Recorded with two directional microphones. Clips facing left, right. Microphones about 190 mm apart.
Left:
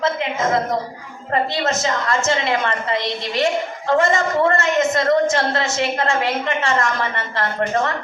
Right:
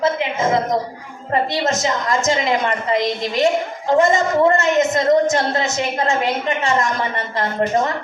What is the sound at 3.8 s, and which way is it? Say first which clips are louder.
A woman's voice: right 2 dB; 15° right (ahead or behind).